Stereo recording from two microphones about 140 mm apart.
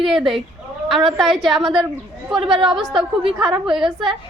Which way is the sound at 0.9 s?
Centre (ahead or behind).